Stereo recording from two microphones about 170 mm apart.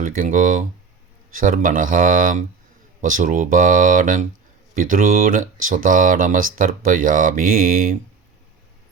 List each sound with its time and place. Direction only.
0.0 s speech: 50° right (ahead or behind)